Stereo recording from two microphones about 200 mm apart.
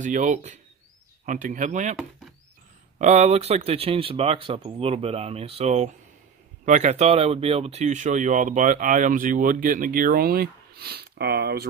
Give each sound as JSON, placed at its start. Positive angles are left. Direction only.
{"t": 0.0, "sound": "speech", "side_deg": -40}
{"t": 3.0, "sound": "speech", "side_deg": -35}